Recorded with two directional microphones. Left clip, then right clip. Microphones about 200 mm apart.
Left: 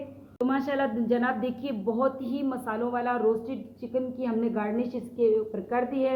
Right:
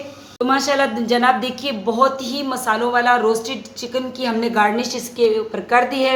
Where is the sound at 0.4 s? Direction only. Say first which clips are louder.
Right 10 dB; centre (ahead or behind).